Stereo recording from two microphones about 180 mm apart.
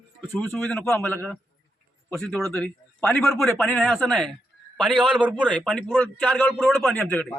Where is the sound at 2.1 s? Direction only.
Centre (ahead or behind).